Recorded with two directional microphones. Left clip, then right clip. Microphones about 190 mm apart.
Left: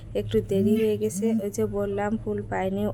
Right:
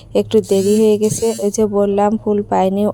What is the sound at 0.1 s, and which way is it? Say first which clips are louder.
Speech: right 12 dB; 35° right (ahead or behind).